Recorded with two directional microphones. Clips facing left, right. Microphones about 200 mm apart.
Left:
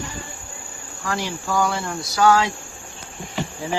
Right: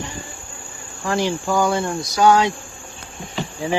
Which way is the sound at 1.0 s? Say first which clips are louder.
Right 6 dB; 25° right (ahead or behind).